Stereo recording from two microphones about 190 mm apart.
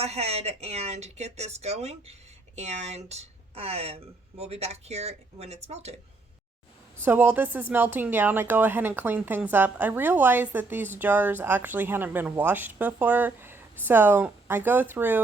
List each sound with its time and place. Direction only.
0.0 s a woman's voice: 35° right (ahead or behind)
7.0 s speech: 10° right (ahead or behind)